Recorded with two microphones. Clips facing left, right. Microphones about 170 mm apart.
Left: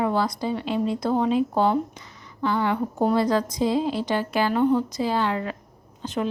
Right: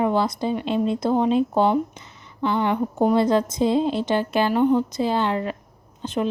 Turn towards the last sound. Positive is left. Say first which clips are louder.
# right 2 dB
turn(degrees=-20)  # may be behind; listen again after turning